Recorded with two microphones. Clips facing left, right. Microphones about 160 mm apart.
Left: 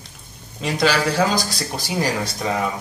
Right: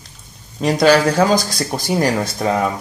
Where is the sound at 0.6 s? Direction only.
45° right (ahead or behind).